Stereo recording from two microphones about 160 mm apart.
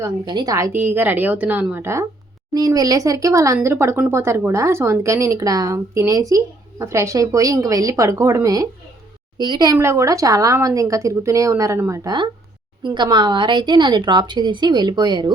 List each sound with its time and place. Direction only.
0.0 s a woman's voice: 25° right (ahead or behind)
9.7 s a woman's voice: 15° right (ahead or behind)